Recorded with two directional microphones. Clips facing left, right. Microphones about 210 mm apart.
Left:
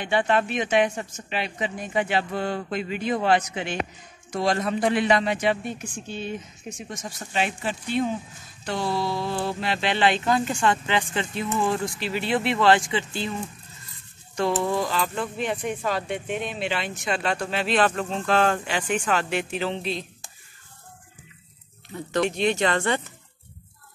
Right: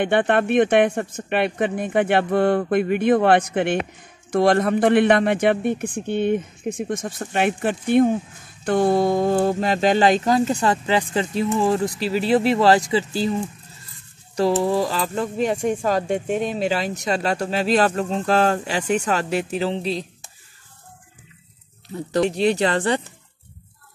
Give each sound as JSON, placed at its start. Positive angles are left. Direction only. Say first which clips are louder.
{"t": 0.0, "sound": "a man's voice", "louder": "right 5 dB", "side_deg": -55}
{"t": 21.8, "sound": "speech", "louder": "right 4 dB", "side_deg": -35}